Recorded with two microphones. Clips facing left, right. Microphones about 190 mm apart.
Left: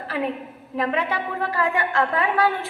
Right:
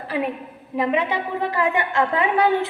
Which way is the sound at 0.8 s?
20° right (ahead or behind).